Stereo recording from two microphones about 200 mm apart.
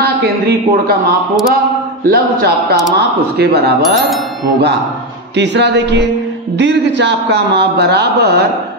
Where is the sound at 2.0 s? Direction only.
50° right (ahead or behind).